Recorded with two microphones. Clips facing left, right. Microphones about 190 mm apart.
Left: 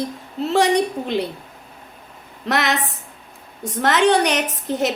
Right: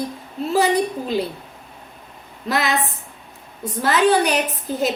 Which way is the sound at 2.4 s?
80° left.